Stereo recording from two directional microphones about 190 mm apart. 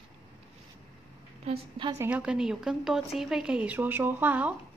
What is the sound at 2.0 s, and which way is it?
A woman's voice, 5° right (ahead or behind).